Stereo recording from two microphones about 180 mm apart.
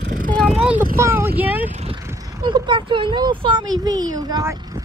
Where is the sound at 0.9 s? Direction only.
15° right (ahead or behind).